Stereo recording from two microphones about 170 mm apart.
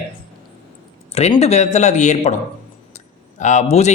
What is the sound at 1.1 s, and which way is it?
Speech, 40° left (ahead or behind).